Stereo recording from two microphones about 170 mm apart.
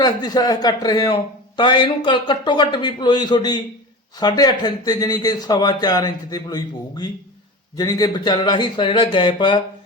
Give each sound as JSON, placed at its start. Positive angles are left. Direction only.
{"t": 0.0, "sound": "a man's voice", "side_deg": 20}